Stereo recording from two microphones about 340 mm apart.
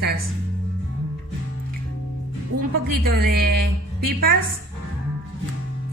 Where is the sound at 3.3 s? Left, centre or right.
Right.